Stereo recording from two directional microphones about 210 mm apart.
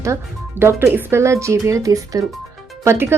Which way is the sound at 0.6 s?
10° right (ahead or behind).